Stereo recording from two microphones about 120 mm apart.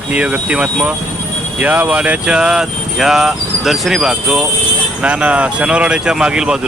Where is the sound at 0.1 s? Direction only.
10° right (ahead or behind).